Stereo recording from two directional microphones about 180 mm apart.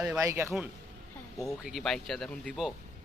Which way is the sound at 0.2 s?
15° right (ahead or behind).